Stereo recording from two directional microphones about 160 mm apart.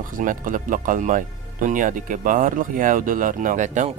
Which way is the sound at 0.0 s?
60° right (ahead or behind).